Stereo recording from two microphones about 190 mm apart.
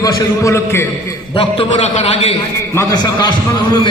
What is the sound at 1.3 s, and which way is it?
A man's voice, 30° left (ahead or behind).